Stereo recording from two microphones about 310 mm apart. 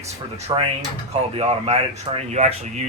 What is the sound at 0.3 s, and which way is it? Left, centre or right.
Speech, right.